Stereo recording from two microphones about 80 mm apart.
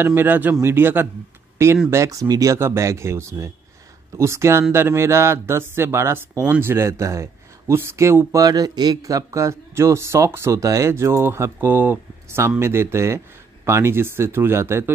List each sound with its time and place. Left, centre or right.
0.0 s speech: right
1.9 s speech: right
8.4 s speech: right
9.0 s speech: right